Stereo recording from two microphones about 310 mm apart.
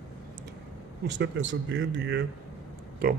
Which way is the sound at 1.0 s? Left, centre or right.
Right.